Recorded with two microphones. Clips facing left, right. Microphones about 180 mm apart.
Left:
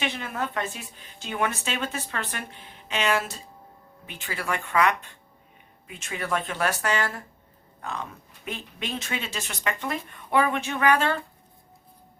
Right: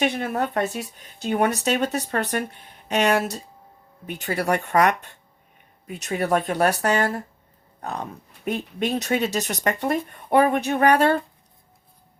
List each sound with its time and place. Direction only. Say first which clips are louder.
0.0 s speech: right 7 dB; 45° right (ahead or behind)